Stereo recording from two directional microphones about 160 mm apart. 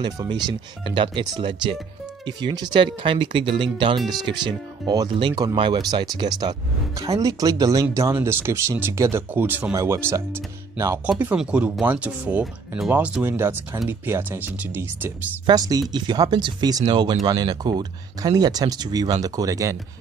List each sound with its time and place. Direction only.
0.0 s speech: 25° right (ahead or behind)
15.4 s speech: 25° right (ahead or behind)